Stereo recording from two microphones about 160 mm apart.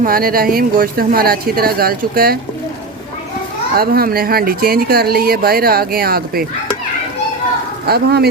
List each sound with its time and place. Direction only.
0.0 s speech: 65° right (ahead or behind)
3.8 s speech: 70° right (ahead or behind)
7.9 s speech: 80° right